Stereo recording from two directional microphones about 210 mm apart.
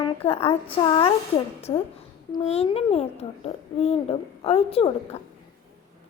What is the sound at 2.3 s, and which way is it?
A child's voice, 30° left (ahead or behind).